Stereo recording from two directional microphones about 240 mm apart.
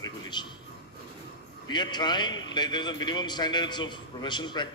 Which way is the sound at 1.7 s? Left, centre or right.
Centre.